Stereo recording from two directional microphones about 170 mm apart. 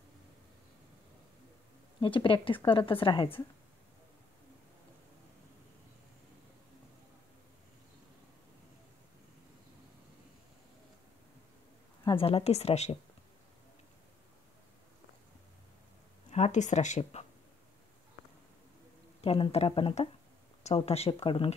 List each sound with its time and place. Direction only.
2.0 s a woman's voice: 30° left (ahead or behind)
12.0 s a woman's voice: 30° left (ahead or behind)
16.3 s a woman's voice: 40° left (ahead or behind)
19.2 s a woman's voice: 35° left (ahead or behind)